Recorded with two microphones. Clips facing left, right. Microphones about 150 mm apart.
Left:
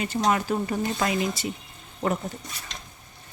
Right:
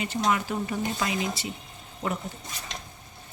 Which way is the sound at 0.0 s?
45° left (ahead or behind).